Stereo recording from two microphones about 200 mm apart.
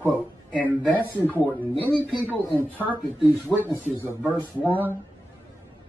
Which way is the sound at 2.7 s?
10° right (ahead or behind).